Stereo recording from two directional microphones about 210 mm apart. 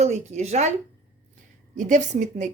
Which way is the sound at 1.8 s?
35° right (ahead or behind).